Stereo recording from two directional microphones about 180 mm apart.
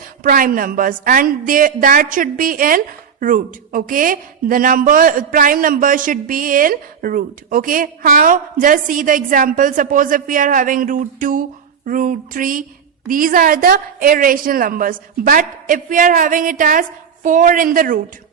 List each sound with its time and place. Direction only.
0.2 s a woman's voice: 50° right (ahead or behind)